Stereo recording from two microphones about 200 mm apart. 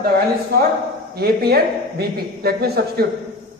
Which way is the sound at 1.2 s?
50° right (ahead or behind).